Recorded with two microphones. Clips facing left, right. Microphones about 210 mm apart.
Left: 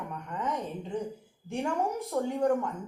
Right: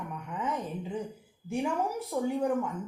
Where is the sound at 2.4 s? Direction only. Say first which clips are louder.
Left 5 dB; 5° right (ahead or behind).